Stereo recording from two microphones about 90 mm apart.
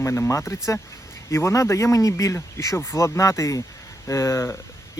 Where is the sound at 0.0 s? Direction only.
30° left (ahead or behind).